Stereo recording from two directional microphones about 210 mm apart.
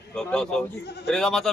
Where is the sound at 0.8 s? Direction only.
50° left (ahead or behind).